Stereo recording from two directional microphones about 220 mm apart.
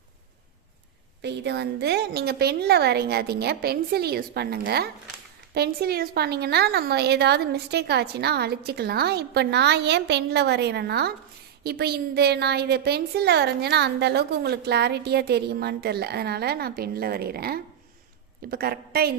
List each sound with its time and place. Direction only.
1.2 s a woman's voice: 50° right (ahead or behind)